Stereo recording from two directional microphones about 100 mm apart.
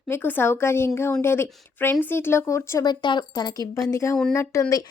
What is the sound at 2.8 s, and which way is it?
Speech, 45° left (ahead or behind).